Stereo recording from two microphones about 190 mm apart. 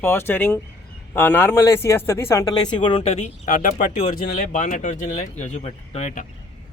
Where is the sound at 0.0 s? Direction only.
10° left (ahead or behind); by 6.2 s 40° left (ahead or behind).